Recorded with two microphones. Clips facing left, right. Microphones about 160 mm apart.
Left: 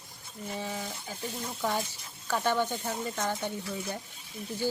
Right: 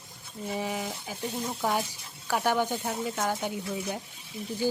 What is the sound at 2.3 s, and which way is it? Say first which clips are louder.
Speech: right 2 dB; 10° right (ahead or behind).